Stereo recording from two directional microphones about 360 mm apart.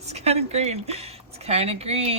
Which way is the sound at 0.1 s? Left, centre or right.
Centre.